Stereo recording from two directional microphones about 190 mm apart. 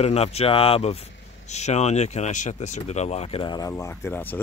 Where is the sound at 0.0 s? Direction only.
35° left (ahead or behind).